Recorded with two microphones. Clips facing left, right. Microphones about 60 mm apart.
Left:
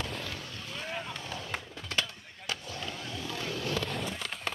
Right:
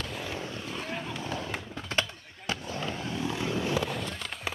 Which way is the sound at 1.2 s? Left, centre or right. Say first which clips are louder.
Right 5 dB; right.